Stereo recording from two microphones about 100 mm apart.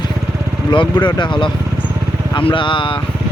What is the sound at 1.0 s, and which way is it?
Speech, 50° left (ahead or behind).